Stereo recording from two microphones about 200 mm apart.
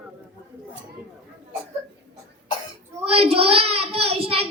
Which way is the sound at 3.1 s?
30° right (ahead or behind).